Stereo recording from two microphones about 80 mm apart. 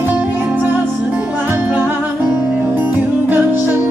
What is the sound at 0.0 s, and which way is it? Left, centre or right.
Music, right.